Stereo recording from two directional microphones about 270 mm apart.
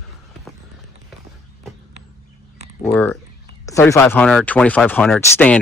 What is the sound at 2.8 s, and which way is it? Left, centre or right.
Speech, centre.